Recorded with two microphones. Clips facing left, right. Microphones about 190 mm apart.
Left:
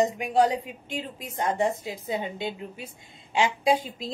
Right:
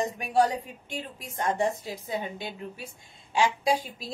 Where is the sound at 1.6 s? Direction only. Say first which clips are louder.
Left 2 dB; 20° left (ahead or behind).